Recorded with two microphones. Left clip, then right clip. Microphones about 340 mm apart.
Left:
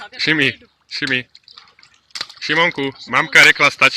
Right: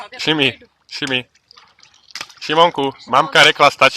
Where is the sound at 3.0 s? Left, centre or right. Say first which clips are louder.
Left 1 dB; centre.